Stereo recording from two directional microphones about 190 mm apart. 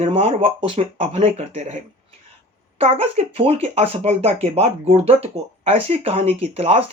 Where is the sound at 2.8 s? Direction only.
30° right (ahead or behind).